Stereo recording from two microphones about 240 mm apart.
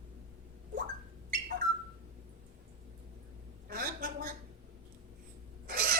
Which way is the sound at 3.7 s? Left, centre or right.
Right.